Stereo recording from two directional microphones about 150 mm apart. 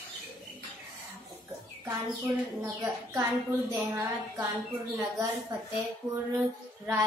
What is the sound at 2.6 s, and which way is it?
A woman's voice, 20° right (ahead or behind).